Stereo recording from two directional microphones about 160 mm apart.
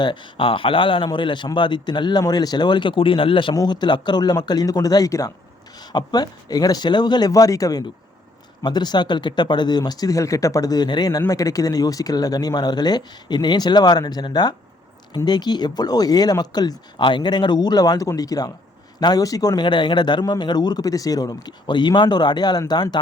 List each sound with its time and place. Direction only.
0.0 s a man's voice: 30° left (ahead or behind)